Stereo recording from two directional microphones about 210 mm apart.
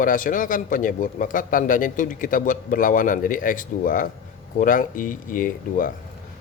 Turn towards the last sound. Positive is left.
turn(degrees=40)  # may be behind; listen again after turning